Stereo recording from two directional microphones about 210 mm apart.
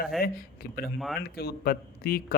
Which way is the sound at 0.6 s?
45° left (ahead or behind).